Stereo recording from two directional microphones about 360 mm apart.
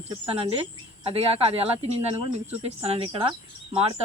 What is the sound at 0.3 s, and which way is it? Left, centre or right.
Speech, centre.